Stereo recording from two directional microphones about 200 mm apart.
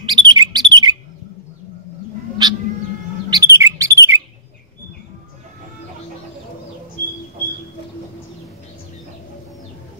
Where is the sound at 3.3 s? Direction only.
15° right (ahead or behind).